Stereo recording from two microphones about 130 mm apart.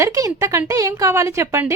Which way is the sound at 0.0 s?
25° right (ahead or behind).